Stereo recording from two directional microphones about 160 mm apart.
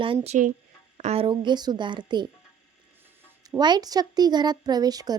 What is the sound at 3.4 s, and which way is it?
Speech, 25° right (ahead or behind).